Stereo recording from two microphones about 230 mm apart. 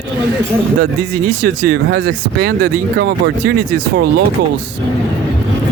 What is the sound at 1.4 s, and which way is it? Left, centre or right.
Speech, right.